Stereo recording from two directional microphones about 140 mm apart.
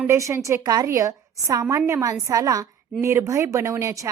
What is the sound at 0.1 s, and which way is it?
A woman's voice, 20° right (ahead or behind).